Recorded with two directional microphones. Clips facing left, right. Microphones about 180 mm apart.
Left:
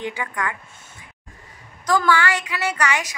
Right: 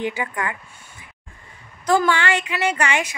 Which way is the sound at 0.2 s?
20° right (ahead or behind).